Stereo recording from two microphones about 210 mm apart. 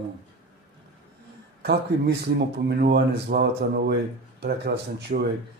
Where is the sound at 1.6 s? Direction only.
50° right (ahead or behind).